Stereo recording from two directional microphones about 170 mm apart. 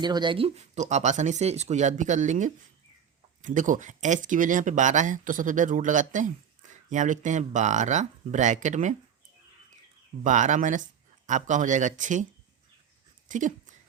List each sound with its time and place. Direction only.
0.0 s speech: 25° right (ahead or behind); by 9.0 s 45° right (ahead or behind)
10.2 s speech: 45° right (ahead or behind)
13.2 s speech: 50° right (ahead or behind)